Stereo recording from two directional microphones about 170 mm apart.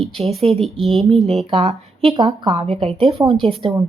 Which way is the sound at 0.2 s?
35° right (ahead or behind).